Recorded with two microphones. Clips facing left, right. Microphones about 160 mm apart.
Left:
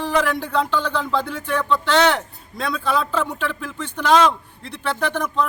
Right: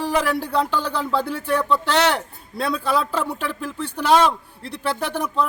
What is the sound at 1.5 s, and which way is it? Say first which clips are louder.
A man's voice: left 2 dB; 10° right (ahead or behind).